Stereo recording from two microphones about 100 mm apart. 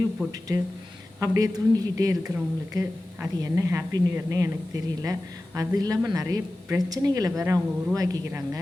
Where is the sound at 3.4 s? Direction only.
30° right (ahead or behind).